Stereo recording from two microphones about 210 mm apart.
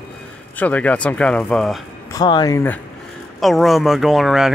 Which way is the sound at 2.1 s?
20° left (ahead or behind).